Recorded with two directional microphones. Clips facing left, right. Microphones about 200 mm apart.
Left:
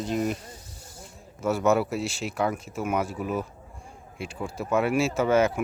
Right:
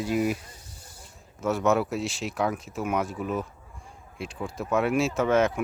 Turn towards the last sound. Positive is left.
turn(degrees=0)  # may be behind; listen again after turning